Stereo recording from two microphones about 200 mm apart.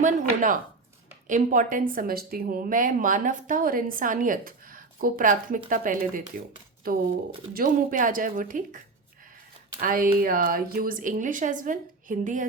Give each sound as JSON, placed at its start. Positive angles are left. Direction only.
{"t": 1.3, "sound": "a woman's voice", "side_deg": -40}
{"t": 9.8, "sound": "a woman's voice", "side_deg": -45}